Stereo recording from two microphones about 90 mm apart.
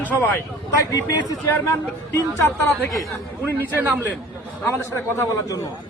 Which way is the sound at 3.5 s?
25° right (ahead or behind).